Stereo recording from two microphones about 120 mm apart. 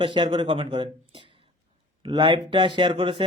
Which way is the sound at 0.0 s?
45° right (ahead or behind).